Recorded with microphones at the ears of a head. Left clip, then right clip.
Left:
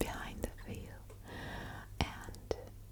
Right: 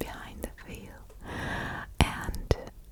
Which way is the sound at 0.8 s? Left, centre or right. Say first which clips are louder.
Right 7 dB; right.